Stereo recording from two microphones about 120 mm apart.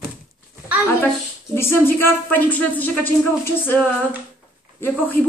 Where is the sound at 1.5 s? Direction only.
20° left (ahead or behind).